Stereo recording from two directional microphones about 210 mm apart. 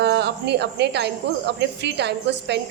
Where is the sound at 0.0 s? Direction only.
55° right (ahead or behind).